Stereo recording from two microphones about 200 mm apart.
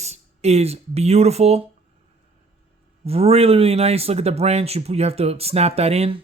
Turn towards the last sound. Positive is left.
turn(degrees=-30)  # may be behind; listen again after turning